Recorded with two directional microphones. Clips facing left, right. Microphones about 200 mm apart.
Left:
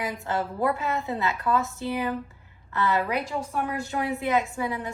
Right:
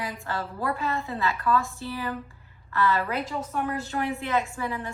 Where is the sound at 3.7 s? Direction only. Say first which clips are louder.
Even; 15° left (ahead or behind).